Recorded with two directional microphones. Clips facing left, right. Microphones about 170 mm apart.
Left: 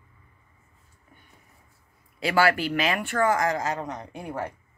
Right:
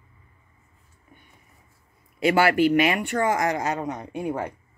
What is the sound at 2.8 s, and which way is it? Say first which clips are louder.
Speech: right 3 dB; 20° right (ahead or behind).